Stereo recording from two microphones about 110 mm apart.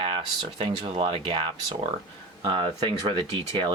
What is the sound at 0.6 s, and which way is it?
Speech, 60° right (ahead or behind).